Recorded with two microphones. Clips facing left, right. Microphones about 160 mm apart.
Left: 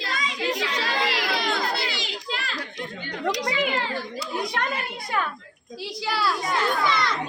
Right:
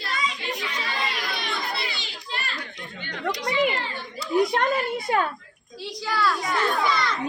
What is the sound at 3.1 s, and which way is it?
Chatter, 10° left (ahead or behind).